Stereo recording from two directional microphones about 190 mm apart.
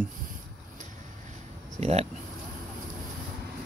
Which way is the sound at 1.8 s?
35° right (ahead or behind).